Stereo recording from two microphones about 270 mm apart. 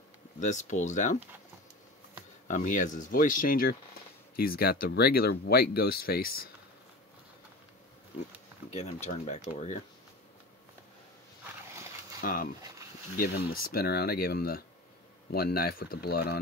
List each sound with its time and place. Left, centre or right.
0.4 s speech: left
2.4 s speech: left
8.6 s speech: left
12.2 s speech: left